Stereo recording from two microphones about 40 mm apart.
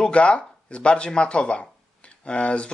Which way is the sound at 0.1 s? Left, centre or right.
Left.